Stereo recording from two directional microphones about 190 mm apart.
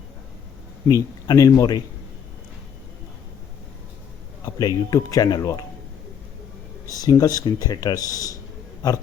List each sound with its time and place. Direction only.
0.9 s speech: 15° left (ahead or behind)
4.4 s speech: 20° left (ahead or behind)
6.8 s speech: 20° left (ahead or behind)